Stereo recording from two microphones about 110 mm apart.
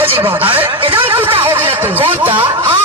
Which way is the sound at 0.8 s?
55° right (ahead or behind).